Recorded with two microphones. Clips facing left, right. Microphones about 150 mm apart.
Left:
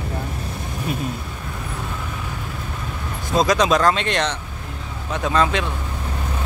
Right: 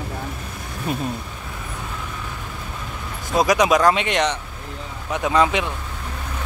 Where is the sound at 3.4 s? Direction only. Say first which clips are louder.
Right 1 dB; 15° right (ahead or behind).